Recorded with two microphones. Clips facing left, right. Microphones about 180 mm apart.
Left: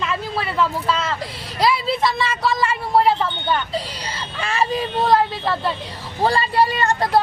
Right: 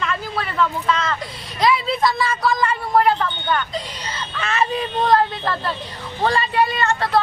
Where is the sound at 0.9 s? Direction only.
30° left (ahead or behind).